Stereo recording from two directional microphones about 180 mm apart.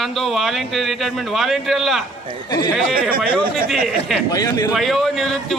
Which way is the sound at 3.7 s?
Centre (ahead or behind).